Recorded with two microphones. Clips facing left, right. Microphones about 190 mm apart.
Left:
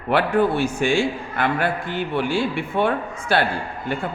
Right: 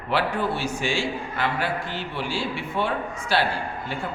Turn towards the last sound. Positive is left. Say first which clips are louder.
# left 3 dB
turn(degrees=55)  # may be behind; listen again after turning